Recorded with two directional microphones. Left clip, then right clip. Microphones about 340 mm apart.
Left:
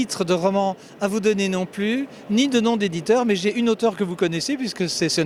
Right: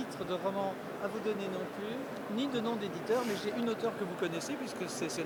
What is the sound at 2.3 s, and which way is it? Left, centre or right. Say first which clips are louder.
Speech: left 16 dB; left.